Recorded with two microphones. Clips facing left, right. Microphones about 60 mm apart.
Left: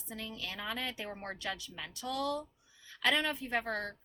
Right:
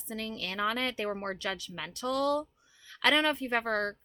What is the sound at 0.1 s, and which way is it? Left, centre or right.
Speech, right.